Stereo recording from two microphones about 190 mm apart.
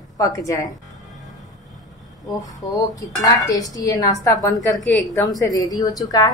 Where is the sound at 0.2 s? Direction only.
15° left (ahead or behind).